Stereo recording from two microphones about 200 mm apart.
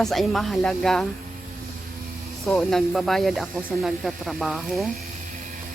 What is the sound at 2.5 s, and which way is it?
Speech, centre (ahead or behind).